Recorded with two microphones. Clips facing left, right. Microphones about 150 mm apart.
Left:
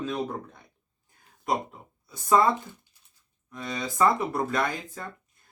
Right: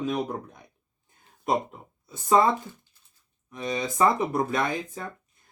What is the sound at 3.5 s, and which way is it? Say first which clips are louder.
Speech: right 4 dB; 20° right (ahead or behind).